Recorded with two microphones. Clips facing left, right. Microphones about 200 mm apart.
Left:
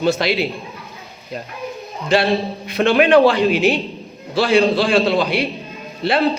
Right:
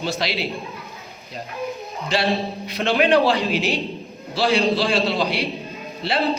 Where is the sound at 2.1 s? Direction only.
55° left (ahead or behind).